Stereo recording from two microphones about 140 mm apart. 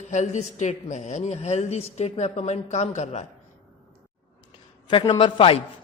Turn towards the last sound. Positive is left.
turn(degrees=40)  # may be behind; listen again after turning